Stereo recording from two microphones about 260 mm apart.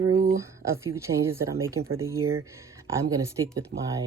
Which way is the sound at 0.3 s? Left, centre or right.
Centre.